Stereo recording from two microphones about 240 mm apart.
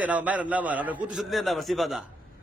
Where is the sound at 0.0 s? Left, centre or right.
Centre.